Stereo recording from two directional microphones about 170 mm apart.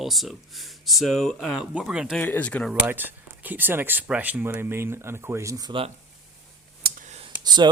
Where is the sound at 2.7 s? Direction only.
10° right (ahead or behind).